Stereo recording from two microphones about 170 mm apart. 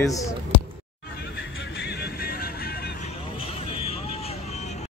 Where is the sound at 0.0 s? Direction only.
20° left (ahead or behind).